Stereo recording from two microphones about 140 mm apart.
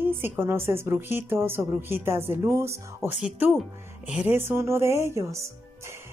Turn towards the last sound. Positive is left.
turn(degrees=-20)  # may be behind; listen again after turning